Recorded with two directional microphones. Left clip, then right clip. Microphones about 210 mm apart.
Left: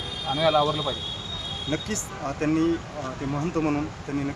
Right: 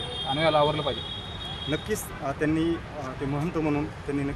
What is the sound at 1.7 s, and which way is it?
Speech, 10° right (ahead or behind).